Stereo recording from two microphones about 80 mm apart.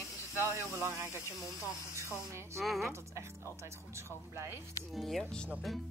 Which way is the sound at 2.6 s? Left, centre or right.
Centre.